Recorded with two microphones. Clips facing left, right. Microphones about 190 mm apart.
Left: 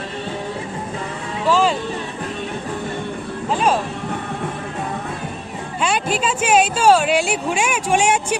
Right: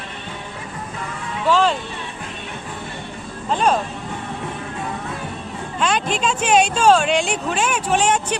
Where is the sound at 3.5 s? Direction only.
5° left (ahead or behind).